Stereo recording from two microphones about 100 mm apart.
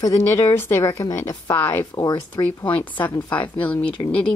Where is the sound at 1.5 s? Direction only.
20° left (ahead or behind).